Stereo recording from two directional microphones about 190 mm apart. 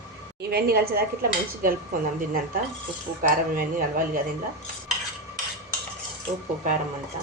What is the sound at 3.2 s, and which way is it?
Dishes, 50° right (ahead or behind).